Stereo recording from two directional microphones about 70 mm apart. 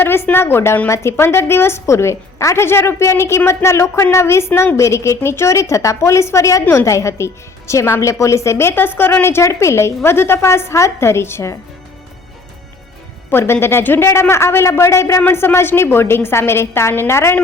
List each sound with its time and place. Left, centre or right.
0.0 s a woman's voice: left
13.4 s a woman's voice: left
15.3 s a woman's voice: left